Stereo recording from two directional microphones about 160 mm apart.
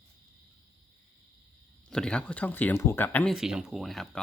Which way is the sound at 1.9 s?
5° left (ahead or behind).